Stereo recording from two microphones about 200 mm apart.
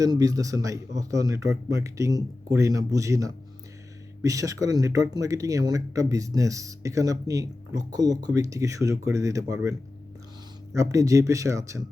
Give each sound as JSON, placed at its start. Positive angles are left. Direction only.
{"t": 0.0, "sound": "speech", "side_deg": -20}
{"t": 10.8, "sound": "speech", "side_deg": -15}